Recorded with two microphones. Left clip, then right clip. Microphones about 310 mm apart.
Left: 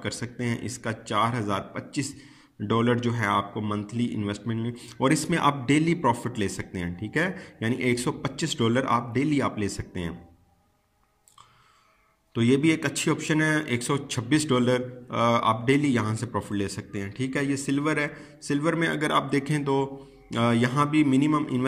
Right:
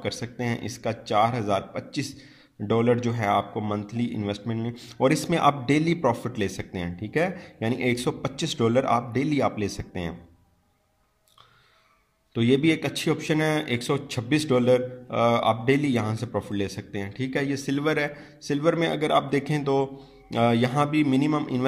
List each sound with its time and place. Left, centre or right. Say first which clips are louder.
0.0 s speech: right 2 dB; centre
12.4 s speech: right 1 dB; right